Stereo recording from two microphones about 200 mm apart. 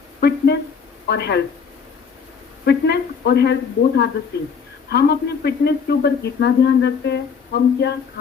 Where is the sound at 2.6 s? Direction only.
55° left (ahead or behind).